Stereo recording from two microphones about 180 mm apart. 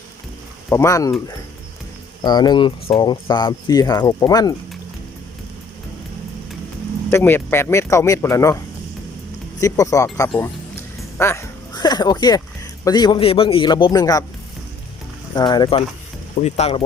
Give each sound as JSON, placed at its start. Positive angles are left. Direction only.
{"t": 0.7, "sound": "speech", "side_deg": 15}
{"t": 2.2, "sound": "speech", "side_deg": 25}
{"t": 7.1, "sound": "speech", "side_deg": 15}
{"t": 11.2, "sound": "a sound", "side_deg": 15}
{"t": 12.8, "sound": "speech", "side_deg": 20}
{"t": 15.4, "sound": "speech", "side_deg": 25}
{"t": 16.4, "sound": "speech", "side_deg": 35}